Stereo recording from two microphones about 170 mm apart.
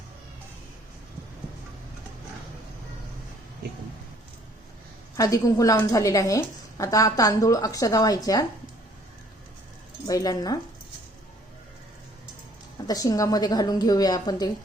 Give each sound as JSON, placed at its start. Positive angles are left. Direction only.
{"t": 5.1, "sound": "a woman's voice", "side_deg": 20}
{"t": 10.1, "sound": "a woman's voice", "side_deg": 20}
{"t": 12.9, "sound": "a woman's voice", "side_deg": 20}